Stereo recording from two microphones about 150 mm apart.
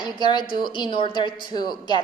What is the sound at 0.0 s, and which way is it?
A woman's voice, 30° left (ahead or behind).